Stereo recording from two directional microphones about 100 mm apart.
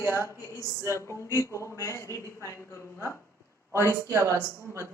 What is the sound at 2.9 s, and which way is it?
Speech, 25° right (ahead or behind).